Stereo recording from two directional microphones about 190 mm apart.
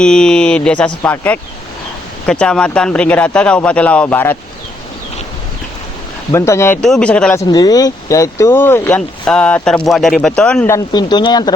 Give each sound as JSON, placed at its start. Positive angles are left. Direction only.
{"t": 0.0, "sound": "a man's voice", "side_deg": 5}
{"t": 6.3, "sound": "speech", "side_deg": 15}
{"t": 6.8, "sound": "speech", "side_deg": 5}
{"t": 7.5, "sound": "speech", "side_deg": 20}
{"t": 10.9, "sound": "speech", "side_deg": 20}